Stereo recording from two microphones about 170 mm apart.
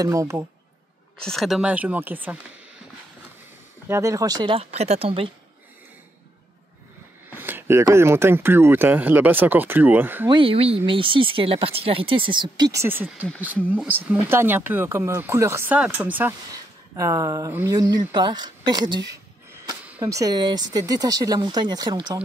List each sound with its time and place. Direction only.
0.0 s speech: 20° right (ahead or behind)
1.2 s speech: centre (ahead or behind)
3.9 s speech: 20° right (ahead or behind); by 5.3 s 35° right (ahead or behind)
7.2 s speech: 10° right (ahead or behind)
10.2 s speech: 30° right (ahead or behind)